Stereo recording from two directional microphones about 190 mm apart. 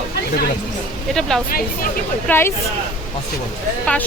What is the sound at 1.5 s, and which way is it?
Speech, 50° left (ahead or behind).